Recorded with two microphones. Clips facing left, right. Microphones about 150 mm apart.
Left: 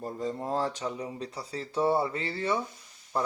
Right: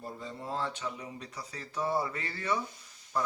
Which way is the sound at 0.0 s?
45° left (ahead or behind).